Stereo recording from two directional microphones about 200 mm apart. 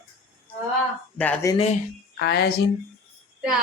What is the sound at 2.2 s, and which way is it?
Speech, 55° left (ahead or behind).